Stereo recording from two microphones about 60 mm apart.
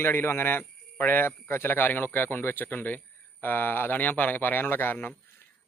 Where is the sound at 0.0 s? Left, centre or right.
Left.